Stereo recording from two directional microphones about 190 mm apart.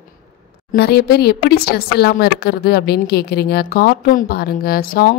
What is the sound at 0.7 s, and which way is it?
Speech, 55° left (ahead or behind).